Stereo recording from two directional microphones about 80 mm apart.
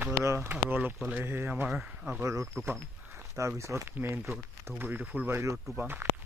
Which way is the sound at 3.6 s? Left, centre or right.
Right.